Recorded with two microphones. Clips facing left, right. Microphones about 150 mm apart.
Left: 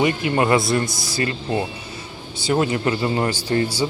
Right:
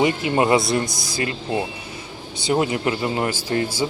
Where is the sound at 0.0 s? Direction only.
20° right (ahead or behind).